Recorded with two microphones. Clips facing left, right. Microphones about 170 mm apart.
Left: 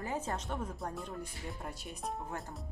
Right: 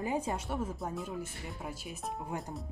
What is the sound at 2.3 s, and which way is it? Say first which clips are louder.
Speech: right 3 dB; 15° right (ahead or behind).